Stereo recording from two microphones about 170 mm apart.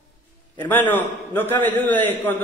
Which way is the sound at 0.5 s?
10° left (ahead or behind).